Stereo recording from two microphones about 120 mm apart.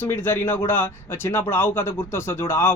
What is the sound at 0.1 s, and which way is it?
A man's voice, 20° left (ahead or behind).